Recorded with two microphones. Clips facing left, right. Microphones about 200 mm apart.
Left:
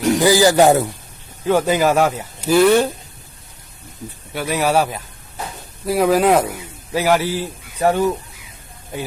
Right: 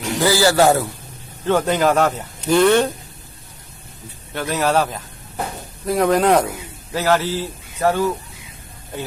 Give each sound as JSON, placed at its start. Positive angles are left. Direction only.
{"t": 0.2, "sound": "speech", "side_deg": 15}
{"t": 1.5, "sound": "speech", "side_deg": 5}
{"t": 4.4, "sound": "speech", "side_deg": 10}